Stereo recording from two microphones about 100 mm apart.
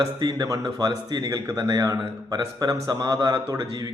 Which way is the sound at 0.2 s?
40° right (ahead or behind).